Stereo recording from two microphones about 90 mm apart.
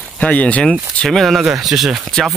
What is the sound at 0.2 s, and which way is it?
Speech, 15° left (ahead or behind).